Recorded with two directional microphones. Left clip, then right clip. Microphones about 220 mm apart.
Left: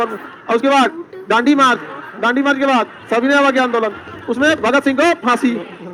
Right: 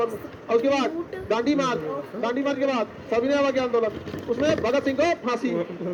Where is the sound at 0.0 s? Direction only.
50° left (ahead or behind).